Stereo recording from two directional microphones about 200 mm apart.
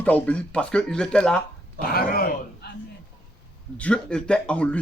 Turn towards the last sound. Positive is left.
turn(degrees=5)  # may be behind; listen again after turning